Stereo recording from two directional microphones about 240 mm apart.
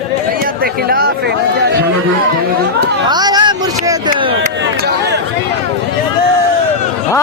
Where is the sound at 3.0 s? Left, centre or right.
Centre.